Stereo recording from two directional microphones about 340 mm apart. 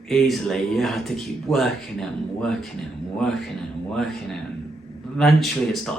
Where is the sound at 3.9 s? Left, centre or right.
Centre.